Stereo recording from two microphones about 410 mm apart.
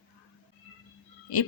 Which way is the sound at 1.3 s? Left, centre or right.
Left.